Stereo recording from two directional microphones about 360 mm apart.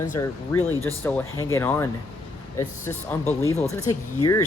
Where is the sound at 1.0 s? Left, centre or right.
Centre.